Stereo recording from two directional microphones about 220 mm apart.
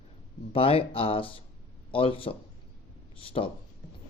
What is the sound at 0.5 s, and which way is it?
A man's voice, 25° left (ahead or behind).